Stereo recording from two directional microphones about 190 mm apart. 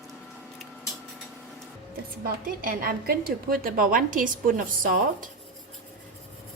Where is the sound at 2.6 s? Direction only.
50° right (ahead or behind).